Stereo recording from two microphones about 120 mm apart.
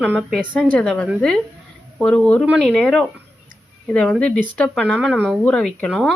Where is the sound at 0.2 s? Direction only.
Centre (ahead or behind).